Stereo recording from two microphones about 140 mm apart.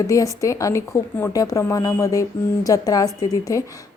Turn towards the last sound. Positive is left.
turn(degrees=25)  # may be behind; listen again after turning